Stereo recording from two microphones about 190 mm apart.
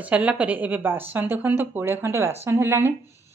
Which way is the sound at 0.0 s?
5° right (ahead or behind).